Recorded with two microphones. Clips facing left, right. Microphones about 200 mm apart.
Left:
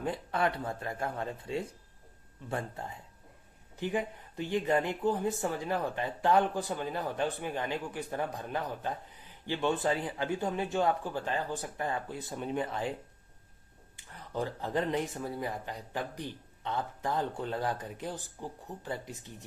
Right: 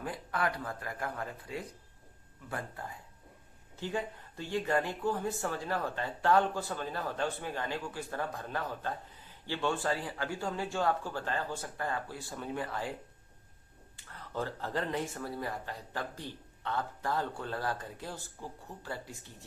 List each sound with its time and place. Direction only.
0.0 s speech: 25° left (ahead or behind)
13.9 s speech: 15° left (ahead or behind)